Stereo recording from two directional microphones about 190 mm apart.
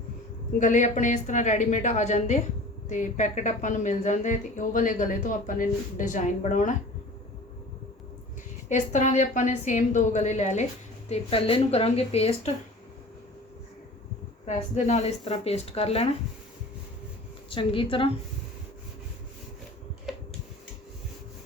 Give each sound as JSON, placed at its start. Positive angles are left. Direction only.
{"t": 0.6, "sound": "speech", "side_deg": 40}
{"t": 8.7, "sound": "speech", "side_deg": 40}
{"t": 14.4, "sound": "speech", "side_deg": 35}
{"t": 17.5, "sound": "a woman's voice", "side_deg": 25}
{"t": 20.1, "sound": "a sound", "side_deg": 0}